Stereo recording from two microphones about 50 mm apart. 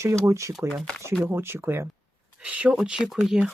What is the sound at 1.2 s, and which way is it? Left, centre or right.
Speech, right.